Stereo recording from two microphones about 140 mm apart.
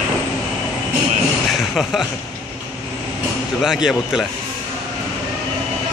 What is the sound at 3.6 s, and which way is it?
Speech, 5° right (ahead or behind).